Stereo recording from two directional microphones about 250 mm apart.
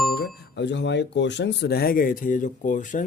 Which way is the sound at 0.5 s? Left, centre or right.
Left.